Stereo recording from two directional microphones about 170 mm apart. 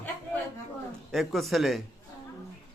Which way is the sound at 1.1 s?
Centre (ahead or behind).